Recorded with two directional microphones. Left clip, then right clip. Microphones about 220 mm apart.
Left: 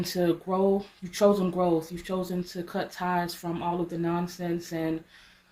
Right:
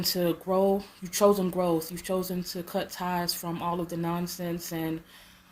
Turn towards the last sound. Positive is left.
turn(degrees=-45)  # may be behind; listen again after turning